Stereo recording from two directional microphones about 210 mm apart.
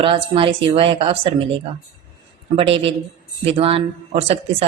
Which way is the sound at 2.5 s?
25° right (ahead or behind).